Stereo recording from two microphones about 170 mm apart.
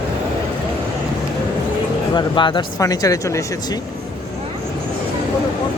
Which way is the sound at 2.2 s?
30° left (ahead or behind).